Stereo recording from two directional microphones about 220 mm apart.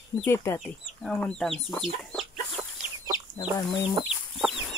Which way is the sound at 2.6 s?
5° right (ahead or behind).